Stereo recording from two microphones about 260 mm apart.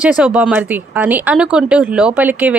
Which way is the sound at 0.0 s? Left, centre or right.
Centre.